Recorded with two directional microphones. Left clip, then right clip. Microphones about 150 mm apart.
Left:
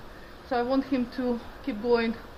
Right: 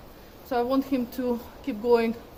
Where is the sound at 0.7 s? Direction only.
55° right (ahead or behind).